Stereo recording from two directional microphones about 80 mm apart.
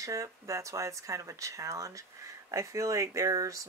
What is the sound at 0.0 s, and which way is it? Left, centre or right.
Speech, right.